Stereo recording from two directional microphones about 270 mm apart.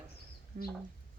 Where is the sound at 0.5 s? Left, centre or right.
Right.